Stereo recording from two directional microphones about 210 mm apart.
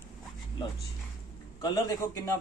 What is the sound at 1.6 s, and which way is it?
Speech, 15° left (ahead or behind).